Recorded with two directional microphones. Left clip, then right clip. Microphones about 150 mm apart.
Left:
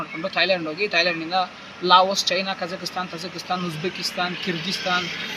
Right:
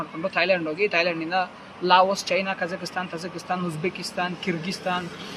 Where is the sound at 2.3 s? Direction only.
40° right (ahead or behind).